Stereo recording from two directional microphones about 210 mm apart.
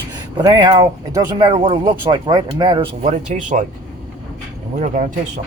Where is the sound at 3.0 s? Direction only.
35° right (ahead or behind).